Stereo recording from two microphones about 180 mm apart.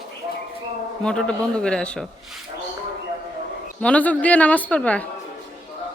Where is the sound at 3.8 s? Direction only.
5° left (ahead or behind).